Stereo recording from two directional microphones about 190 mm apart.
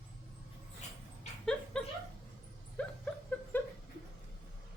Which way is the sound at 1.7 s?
5° left (ahead or behind).